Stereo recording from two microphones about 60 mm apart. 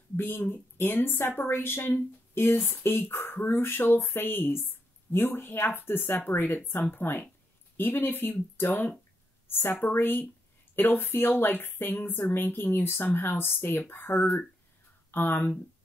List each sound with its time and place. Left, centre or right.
0.1 s a woman's voice: left